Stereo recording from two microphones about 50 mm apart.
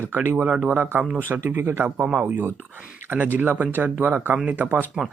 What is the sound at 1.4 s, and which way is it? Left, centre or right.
Speech, right.